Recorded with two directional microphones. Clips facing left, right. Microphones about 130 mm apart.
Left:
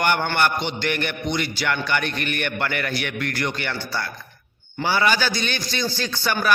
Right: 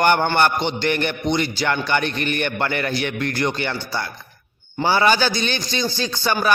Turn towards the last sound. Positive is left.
turn(degrees=-20)  # may be behind; listen again after turning